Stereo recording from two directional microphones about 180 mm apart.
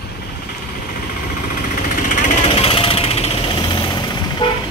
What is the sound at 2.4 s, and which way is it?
Jackhammer, 30° left (ahead or behind).